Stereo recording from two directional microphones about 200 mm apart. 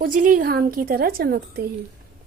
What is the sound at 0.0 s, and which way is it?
Speech, 45° right (ahead or behind).